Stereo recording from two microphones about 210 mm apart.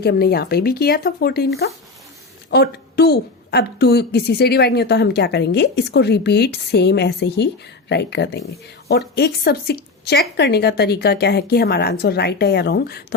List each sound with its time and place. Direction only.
0.0 s a woman's voice: 50° left (ahead or behind)
2.5 s a woman's voice: 50° left (ahead or behind)